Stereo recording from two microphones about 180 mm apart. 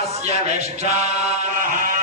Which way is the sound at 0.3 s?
35° right (ahead or behind).